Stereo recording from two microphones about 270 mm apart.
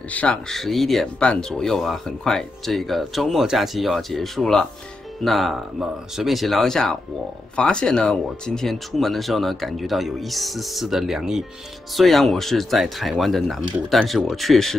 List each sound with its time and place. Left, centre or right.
0.1 s speech: centre